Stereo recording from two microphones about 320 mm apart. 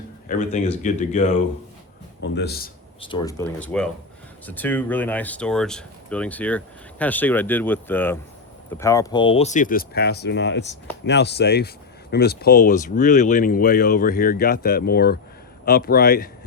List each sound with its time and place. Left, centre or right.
0.3 s speech: left
3.0 s speech: centre